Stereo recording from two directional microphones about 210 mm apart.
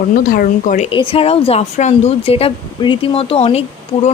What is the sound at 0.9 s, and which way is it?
Speech, 25° left (ahead or behind).